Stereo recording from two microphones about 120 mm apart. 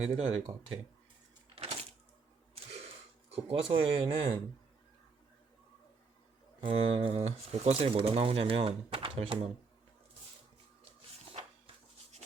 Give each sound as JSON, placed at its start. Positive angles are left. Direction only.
{"t": 0.0, "sound": "speech", "side_deg": -60}
{"t": 1.5, "sound": "a sound", "side_deg": -55}
{"t": 3.2, "sound": "speech", "side_deg": -55}
{"t": 6.6, "sound": "speech", "side_deg": -50}